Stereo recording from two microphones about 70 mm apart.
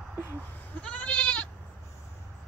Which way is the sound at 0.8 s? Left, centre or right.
Centre.